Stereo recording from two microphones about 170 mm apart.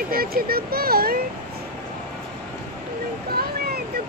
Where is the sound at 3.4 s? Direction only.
65° right (ahead or behind).